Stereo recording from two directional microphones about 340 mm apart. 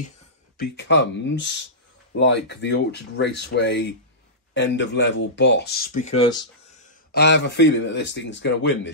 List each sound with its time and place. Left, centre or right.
0.6 s speech: left; by 6.4 s centre
7.1 s speech: left